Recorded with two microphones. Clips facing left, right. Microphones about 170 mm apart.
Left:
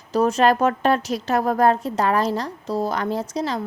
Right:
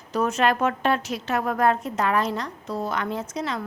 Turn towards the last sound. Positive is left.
turn(degrees=35)  # may be behind; listen again after turning